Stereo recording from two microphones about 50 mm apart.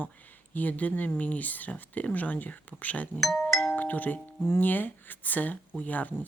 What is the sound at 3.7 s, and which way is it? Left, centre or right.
A woman's voice, left.